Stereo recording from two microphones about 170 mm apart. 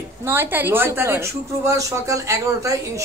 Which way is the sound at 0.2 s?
15° right (ahead or behind).